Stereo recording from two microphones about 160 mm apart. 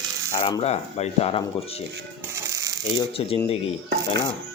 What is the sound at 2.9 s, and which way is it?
Speech, 35° left (ahead or behind).